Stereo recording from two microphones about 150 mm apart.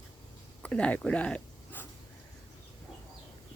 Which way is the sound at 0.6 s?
10° left (ahead or behind).